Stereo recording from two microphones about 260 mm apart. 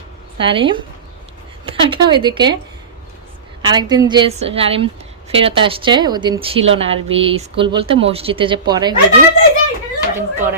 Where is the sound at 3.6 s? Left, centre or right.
Centre.